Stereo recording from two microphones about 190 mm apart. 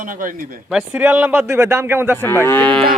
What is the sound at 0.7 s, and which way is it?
Speech, 5° right (ahead or behind).